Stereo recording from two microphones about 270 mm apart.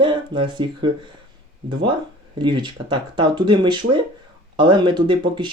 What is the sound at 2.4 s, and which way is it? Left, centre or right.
Speech, centre.